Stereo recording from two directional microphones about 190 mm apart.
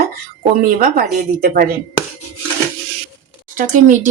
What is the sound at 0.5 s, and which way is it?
Speech, 50° right (ahead or behind).